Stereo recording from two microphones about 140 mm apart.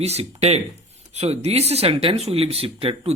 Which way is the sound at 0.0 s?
50° right (ahead or behind).